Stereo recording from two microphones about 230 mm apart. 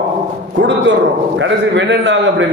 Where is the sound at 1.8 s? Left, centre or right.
Right.